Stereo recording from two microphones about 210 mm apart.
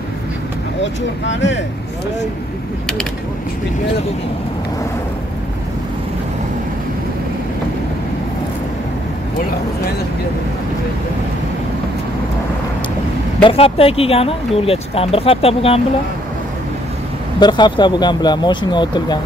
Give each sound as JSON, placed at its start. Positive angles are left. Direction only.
{"t": 1.2, "sound": "speech", "side_deg": 60}
{"t": 13.4, "sound": "speech", "side_deg": 25}
{"t": 17.4, "sound": "speech", "side_deg": 20}